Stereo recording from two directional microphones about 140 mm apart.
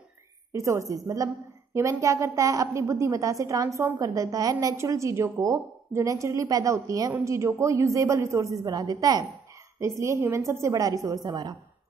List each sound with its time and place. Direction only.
0.5 s a woman's voice: 20° right (ahead or behind)